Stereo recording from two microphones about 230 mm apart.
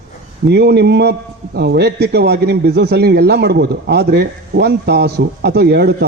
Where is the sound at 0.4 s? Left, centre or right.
Right.